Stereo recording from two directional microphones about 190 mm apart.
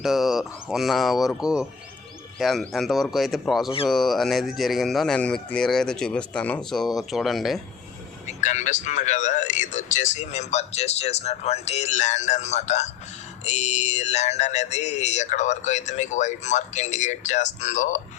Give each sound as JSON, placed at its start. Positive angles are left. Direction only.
{"t": 0.0, "sound": "speech", "side_deg": 0}
{"t": 8.3, "sound": "a man's voice", "side_deg": 40}